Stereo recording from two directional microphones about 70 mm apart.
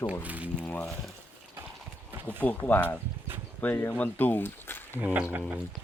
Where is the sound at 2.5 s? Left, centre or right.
Left.